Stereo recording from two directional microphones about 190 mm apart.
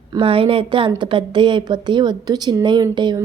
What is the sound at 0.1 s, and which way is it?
Speech, 25° right (ahead or behind).